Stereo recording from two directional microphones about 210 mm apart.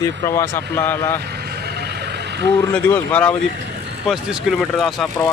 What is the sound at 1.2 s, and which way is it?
Vehicle, 50° right (ahead or behind).